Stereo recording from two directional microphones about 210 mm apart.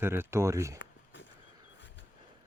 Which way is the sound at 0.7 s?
60° left (ahead or behind).